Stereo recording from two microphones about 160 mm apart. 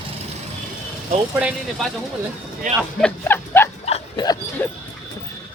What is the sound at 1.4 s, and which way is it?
Speech, 5° right (ahead or behind).